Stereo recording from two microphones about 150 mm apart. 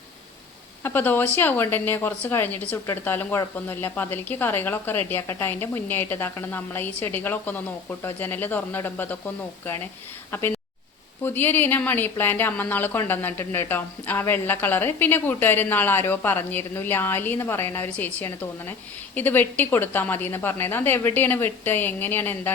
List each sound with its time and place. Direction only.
0.8 s speech: 15° left (ahead or behind)